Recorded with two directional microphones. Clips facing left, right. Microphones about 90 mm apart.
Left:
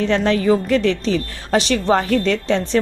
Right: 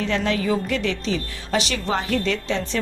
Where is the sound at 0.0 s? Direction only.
40° left (ahead or behind).